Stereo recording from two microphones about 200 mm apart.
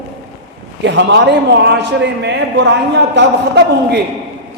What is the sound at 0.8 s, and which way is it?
A man's voice, 60° right (ahead or behind).